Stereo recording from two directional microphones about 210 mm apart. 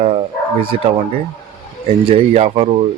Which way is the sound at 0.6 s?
25° right (ahead or behind).